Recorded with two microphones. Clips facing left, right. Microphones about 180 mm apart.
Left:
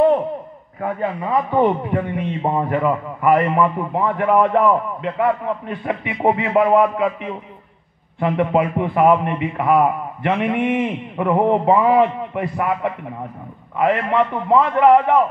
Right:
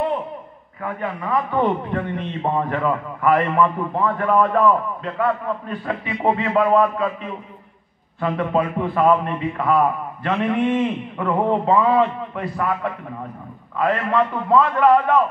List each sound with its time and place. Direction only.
0.7 s a man's voice: 30° left (ahead or behind)